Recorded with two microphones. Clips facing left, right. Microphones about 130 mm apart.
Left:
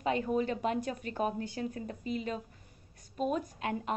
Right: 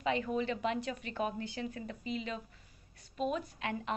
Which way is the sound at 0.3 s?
45° left (ahead or behind).